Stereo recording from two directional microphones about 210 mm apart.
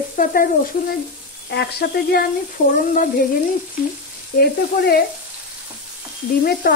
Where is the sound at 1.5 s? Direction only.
50° left (ahead or behind).